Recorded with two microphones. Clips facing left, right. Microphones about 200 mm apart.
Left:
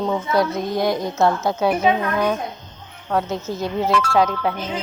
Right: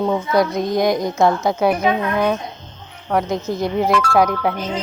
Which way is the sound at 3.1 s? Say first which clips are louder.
Right 3 dB; 15° right (ahead or behind).